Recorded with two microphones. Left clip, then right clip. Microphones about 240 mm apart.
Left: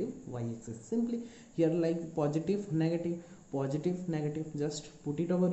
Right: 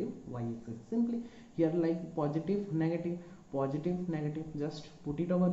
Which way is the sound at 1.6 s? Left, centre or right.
Left.